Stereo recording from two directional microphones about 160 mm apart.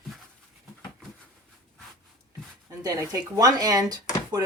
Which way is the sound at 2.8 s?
20° right (ahead or behind).